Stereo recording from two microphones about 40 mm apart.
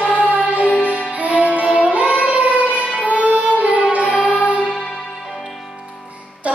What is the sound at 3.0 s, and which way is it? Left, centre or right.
Violin, right.